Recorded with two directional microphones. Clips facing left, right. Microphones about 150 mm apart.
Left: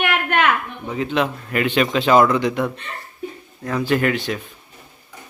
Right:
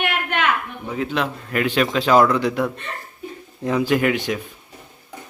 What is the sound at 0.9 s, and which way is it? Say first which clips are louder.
A man's voice: left 2 dB; centre (ahead or behind).